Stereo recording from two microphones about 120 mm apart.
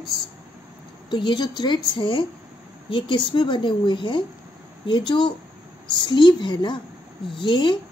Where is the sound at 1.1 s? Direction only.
40° left (ahead or behind).